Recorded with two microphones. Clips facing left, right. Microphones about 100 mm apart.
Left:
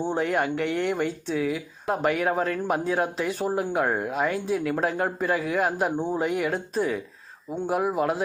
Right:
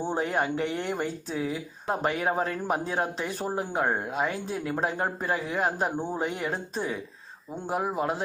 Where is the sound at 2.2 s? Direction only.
5° right (ahead or behind).